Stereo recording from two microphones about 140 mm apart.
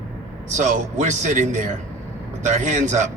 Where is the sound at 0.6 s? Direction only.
60° right (ahead or behind).